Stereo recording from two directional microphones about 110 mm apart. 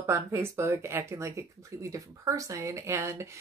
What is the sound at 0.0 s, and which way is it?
Speech, 25° right (ahead or behind).